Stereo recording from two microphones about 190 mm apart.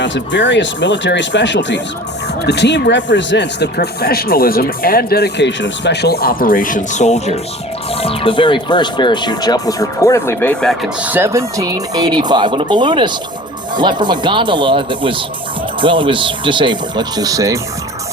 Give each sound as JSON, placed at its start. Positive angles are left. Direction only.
{"t": 0.0, "sound": "speech", "side_deg": 70}
{"t": 11.0, "sound": "speech", "side_deg": -10}